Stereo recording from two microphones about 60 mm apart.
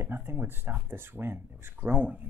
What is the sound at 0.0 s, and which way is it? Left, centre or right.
Speech, right.